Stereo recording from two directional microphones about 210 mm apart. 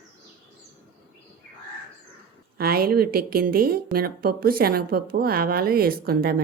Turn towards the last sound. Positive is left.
turn(degrees=-45)  # may be behind; listen again after turning